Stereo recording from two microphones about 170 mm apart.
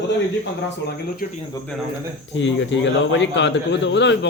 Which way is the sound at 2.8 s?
90° left.